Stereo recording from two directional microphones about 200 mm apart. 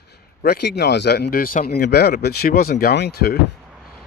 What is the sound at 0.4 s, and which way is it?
Speech, 55° left (ahead or behind).